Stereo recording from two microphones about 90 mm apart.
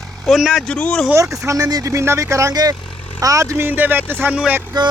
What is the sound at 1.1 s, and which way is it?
Speech, 35° right (ahead or behind).